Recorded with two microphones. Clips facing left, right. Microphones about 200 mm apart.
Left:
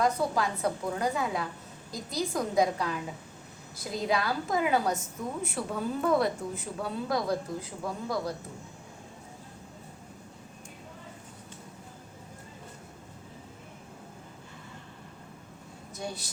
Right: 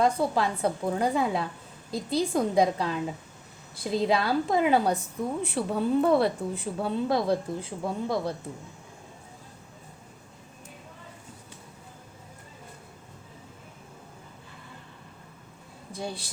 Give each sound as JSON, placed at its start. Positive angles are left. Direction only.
{"t": 0.0, "sound": "speech", "side_deg": -30}
{"t": 3.9, "sound": "speech", "side_deg": -30}
{"t": 15.9, "sound": "speech", "side_deg": -30}